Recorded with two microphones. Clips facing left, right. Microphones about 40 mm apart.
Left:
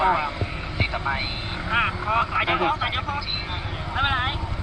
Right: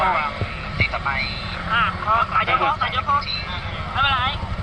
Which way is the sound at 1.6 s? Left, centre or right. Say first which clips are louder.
Right 4 dB; right.